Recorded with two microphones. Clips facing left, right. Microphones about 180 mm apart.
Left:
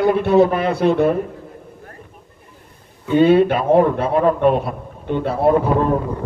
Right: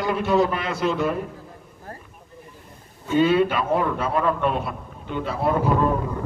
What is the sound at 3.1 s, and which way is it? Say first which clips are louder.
A man's voice: left 6 dB; 55° left (ahead or behind).